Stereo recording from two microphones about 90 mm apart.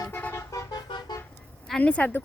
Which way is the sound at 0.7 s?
50° left (ahead or behind).